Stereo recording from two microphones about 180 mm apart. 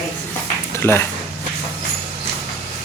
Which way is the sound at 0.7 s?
15° left (ahead or behind).